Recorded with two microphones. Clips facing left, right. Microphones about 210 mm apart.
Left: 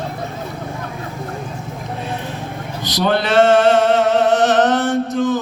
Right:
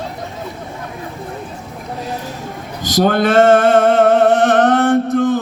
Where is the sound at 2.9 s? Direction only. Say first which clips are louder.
Right 4 dB; 50° right (ahead or behind).